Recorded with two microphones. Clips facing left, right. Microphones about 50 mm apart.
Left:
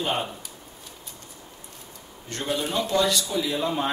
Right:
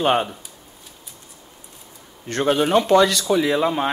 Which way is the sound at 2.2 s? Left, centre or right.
Right.